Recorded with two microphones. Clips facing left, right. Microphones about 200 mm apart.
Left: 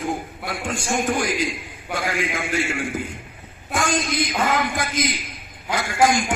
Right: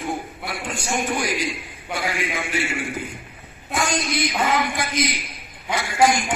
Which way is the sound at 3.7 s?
50° left (ahead or behind).